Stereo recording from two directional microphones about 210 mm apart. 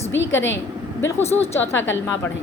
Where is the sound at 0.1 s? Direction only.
60° left (ahead or behind).